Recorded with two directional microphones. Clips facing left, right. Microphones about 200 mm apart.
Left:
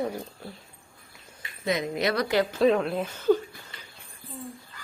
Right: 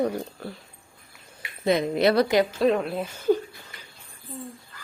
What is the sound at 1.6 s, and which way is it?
Speech, 30° right (ahead or behind).